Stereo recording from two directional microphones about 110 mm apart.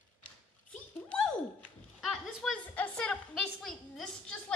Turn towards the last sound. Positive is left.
turn(degrees=5)  # may be behind; listen again after turning